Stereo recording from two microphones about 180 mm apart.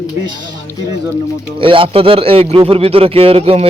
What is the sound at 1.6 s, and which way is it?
Speech, 30° right (ahead or behind).